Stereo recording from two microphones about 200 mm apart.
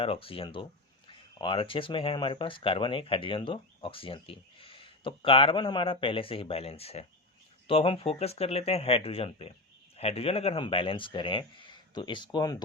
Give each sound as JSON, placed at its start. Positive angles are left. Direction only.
{"t": 0.0, "sound": "speech", "side_deg": 25}